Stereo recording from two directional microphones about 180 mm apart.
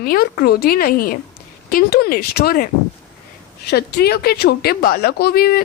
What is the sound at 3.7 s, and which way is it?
A woman's voice, 65° left (ahead or behind).